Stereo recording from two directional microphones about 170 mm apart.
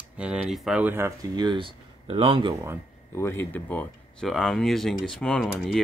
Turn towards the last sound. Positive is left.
turn(degrees=5)  # may be behind; listen again after turning